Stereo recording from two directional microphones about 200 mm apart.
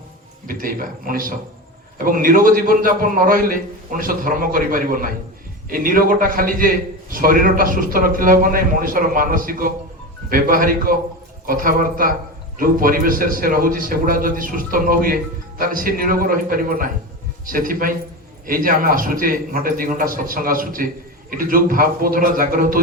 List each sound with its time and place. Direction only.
0.4 s speech: 45° right (ahead or behind)